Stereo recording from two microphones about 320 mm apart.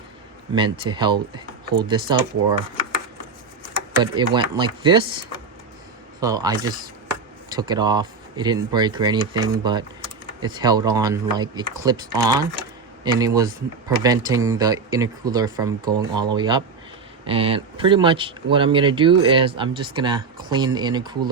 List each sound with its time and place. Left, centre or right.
0.5 s speech: centre
3.9 s speech: centre
6.1 s speech: centre